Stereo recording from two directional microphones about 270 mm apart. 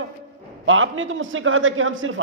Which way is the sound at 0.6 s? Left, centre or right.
Right.